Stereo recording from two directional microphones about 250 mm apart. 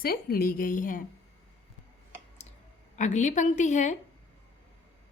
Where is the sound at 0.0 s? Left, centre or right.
Left.